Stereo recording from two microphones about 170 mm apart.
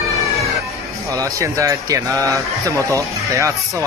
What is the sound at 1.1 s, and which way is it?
A man's voice, 20° right (ahead or behind).